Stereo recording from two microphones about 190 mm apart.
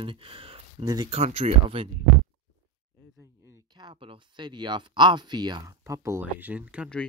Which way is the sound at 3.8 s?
25° right (ahead or behind).